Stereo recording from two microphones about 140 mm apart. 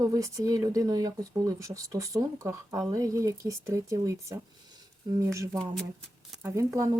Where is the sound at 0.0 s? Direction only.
25° right (ahead or behind).